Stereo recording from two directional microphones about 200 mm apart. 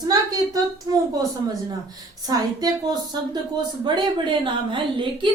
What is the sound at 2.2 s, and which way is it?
A woman's voice, 20° right (ahead or behind).